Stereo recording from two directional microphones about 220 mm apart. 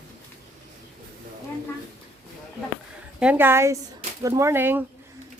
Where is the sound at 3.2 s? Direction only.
10° right (ahead or behind).